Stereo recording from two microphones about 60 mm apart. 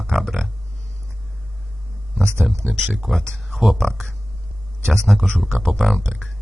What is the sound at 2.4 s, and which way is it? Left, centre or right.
A man's voice, centre.